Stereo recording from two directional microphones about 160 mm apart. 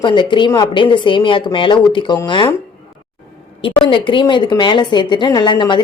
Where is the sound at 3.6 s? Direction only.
30° left (ahead or behind).